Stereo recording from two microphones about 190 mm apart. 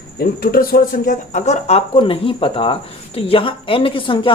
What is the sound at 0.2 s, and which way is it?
A woman's voice, 50° left (ahead or behind).